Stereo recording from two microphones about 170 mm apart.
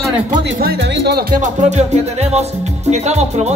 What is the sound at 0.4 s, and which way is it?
Speech, 75° right (ahead or behind).